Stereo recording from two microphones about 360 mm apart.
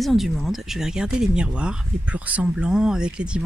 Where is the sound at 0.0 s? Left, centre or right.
Centre.